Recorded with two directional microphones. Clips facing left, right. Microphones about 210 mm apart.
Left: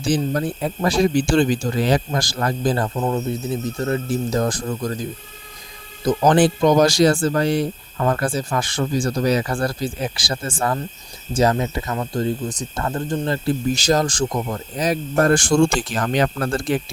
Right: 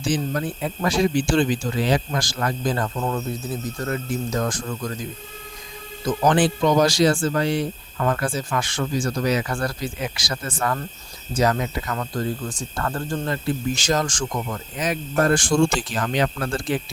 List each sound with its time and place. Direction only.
0.0 s speech: 35° left (ahead or behind)
6.1 s speech: 45° left (ahead or behind)